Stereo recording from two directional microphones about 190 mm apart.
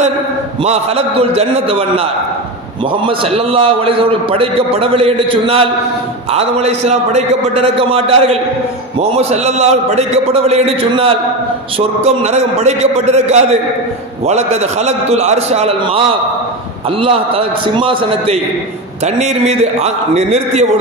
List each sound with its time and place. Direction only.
0.7 s a man's voice: 30° right (ahead or behind)
3.1 s a man's voice: 30° right (ahead or behind)